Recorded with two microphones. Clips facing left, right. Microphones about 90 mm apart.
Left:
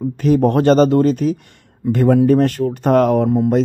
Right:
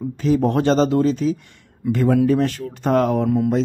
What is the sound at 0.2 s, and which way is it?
Speech, 55° left (ahead or behind).